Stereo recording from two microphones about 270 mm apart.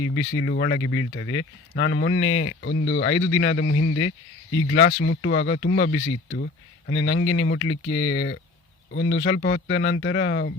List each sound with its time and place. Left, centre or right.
0.0 s a man's voice: left
6.3 s speech: left
6.9 s a man's voice: left